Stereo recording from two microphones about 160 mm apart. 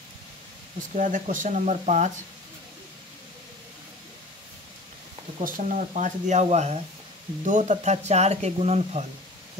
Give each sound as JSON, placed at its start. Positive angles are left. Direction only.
{"t": 0.9, "sound": "speech", "side_deg": -50}
{"t": 5.4, "sound": "speech", "side_deg": -50}